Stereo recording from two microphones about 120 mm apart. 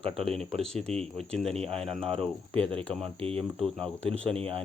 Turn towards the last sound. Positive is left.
turn(degrees=-55)  # may be behind; listen again after turning